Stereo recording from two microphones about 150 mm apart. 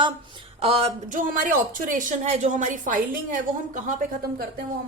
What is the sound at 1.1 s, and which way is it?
A woman's voice, 65° right (ahead or behind).